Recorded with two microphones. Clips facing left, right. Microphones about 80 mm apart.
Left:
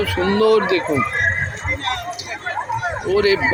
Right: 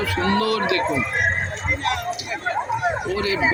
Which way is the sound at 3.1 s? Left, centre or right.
Left.